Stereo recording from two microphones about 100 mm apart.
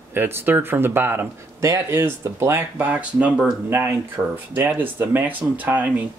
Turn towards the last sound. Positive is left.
turn(degrees=-15)  # may be behind; listen again after turning